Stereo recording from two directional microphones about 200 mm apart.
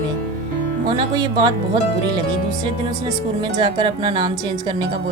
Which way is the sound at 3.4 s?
25° right (ahead or behind).